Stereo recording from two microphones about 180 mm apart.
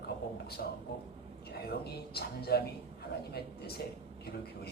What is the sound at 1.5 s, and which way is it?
A man's voice, 60° left (ahead or behind).